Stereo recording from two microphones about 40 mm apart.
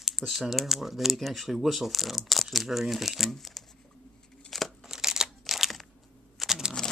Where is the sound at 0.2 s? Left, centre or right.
Centre.